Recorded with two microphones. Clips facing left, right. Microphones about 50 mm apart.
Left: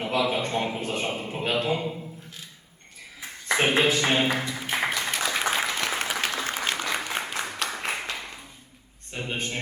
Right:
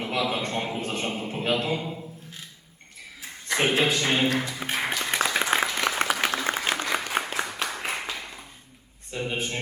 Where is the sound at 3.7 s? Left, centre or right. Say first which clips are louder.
Left 1 dB; left.